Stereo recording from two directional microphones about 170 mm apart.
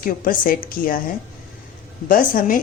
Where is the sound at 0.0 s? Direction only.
55° left (ahead or behind).